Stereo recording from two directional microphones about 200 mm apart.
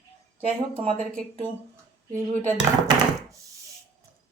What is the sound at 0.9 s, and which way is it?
Speech, 10° left (ahead or behind).